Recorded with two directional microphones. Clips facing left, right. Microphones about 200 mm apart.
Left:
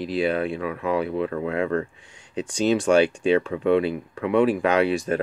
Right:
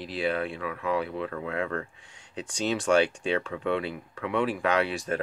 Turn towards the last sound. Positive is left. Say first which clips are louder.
# left 6 dB
turn(degrees=15)  # may be behind; listen again after turning